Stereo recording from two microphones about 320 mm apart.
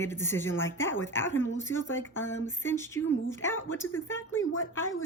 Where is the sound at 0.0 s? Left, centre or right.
Centre.